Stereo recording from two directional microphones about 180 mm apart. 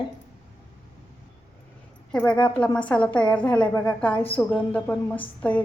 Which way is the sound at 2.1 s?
10° left (ahead or behind).